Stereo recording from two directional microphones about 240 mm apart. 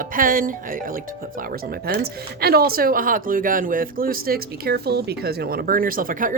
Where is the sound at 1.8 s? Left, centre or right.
Right.